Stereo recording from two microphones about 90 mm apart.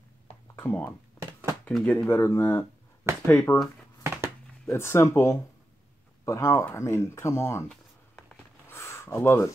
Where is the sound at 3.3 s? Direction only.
20° left (ahead or behind).